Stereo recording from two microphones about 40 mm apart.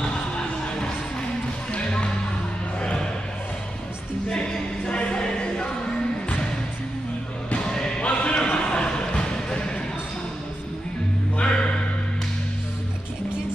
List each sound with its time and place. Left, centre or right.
0.0 s music: centre
1.7 s basketball bounce: left
2.8 s music: left
4.3 s choir: left
7.7 s choir: centre
8.0 s a sound: left
11.3 s music: left